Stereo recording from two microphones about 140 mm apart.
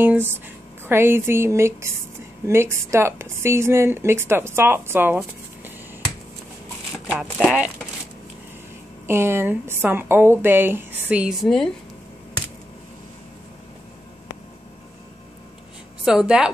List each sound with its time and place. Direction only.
0.0 s a woman's voice: 15° right (ahead or behind)
7.3 s a woman's voice: 5° right (ahead or behind)
9.0 s a woman's voice: 15° right (ahead or behind)
11.4 s a woman's voice: 5° left (ahead or behind)
16.1 s a woman's voice: 5° right (ahead or behind)